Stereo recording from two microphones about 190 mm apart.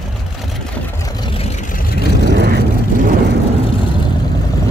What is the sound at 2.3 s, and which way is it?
Vehicle, 60° right (ahead or behind).